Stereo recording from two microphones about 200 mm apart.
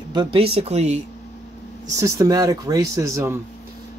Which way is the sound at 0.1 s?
25° right (ahead or behind).